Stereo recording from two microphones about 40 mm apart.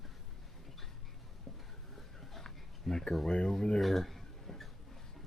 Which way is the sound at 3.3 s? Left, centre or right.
Centre.